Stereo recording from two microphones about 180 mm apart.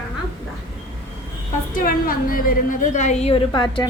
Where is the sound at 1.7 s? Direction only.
55° left (ahead or behind).